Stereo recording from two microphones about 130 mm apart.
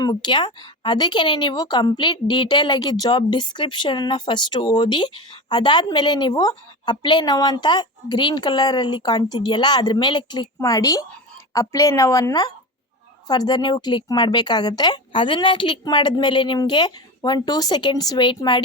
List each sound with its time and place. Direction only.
0.0 s a woman's voice: 35° left (ahead or behind)